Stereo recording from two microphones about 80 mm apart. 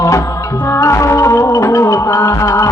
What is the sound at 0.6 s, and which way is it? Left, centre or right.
Music, left.